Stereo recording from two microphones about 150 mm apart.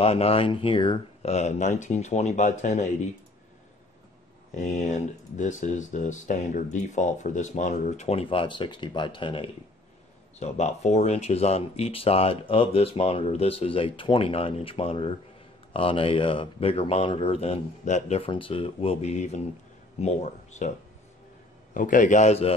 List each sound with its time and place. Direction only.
0.0 s speech: 40° left (ahead or behind)
4.6 s speech: 50° left (ahead or behind); by 9.5 s 35° left (ahead or behind)
10.4 s speech: 50° left (ahead or behind)
21.7 s a man's voice: 60° left (ahead or behind)